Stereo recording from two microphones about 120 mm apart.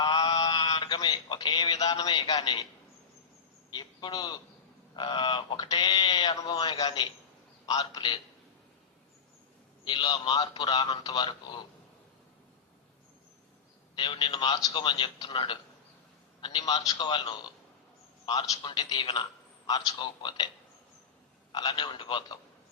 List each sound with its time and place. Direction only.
0.0 s a sound: 35° left (ahead or behind)
2.1 s a man's voice: 40° left (ahead or behind)
3.7 s a man's voice: 35° left (ahead or behind)
9.8 s a man's voice: 40° left (ahead or behind)
13.9 s a man's voice: 40° left (ahead or behind)
21.5 s a man's voice: 40° left (ahead or behind)